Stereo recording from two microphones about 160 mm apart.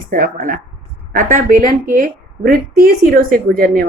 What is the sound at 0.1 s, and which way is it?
A woman's voice, 60° right (ahead or behind).